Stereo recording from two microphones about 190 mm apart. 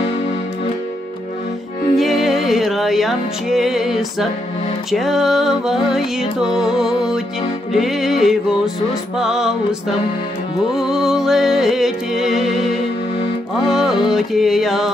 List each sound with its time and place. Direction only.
2.0 s music: centre (ahead or behind)